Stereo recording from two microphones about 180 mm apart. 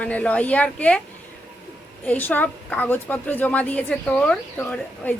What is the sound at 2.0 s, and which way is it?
A woman's voice, 10° left (ahead or behind).